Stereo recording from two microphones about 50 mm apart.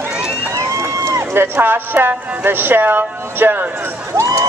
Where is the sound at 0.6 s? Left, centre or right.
Right.